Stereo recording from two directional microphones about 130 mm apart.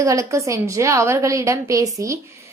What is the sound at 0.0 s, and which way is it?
A woman's voice, 25° right (ahead or behind).